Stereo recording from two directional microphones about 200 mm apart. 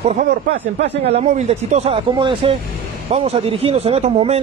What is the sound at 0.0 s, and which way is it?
A man's voice, 30° right (ahead or behind).